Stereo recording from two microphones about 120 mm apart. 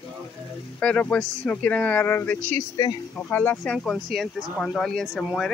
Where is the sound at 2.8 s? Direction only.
35° left (ahead or behind).